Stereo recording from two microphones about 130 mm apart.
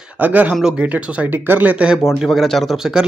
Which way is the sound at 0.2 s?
10° right (ahead or behind).